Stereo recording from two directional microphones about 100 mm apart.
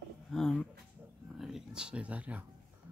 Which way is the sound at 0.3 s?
5° left (ahead or behind).